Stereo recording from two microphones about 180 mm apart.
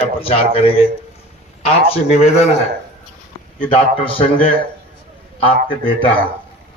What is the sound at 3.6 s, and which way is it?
A man's voice, 30° left (ahead or behind).